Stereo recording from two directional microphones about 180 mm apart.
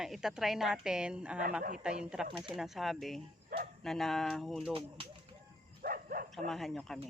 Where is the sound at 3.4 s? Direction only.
55° right (ahead or behind).